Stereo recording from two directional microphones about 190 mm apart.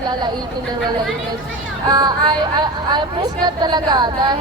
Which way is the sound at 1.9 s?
20° right (ahead or behind).